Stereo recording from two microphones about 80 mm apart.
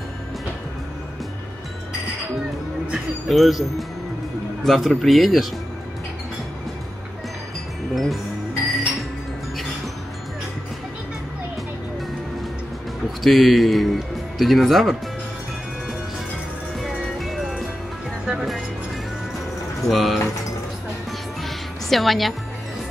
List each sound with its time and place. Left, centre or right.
2.9 s music: centre
4.6 s speech: centre
7.9 s music: centre
13.2 s speech: centre
16.8 s music: centre
19.9 s speech: centre
21.4 s music: centre